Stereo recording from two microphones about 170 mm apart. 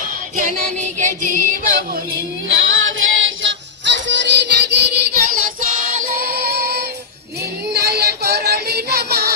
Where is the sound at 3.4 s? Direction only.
90° right.